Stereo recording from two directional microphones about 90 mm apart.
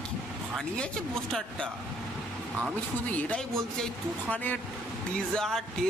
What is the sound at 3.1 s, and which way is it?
Speech, 15° left (ahead or behind).